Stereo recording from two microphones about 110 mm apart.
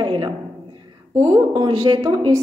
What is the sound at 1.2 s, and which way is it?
Speech, 30° right (ahead or behind).